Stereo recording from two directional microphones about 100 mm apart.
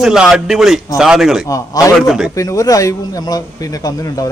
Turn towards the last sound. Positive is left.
turn(degrees=35)  # may be behind; listen again after turning